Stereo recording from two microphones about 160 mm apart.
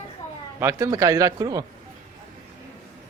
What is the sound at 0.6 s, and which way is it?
A man's voice, 15° right (ahead or behind).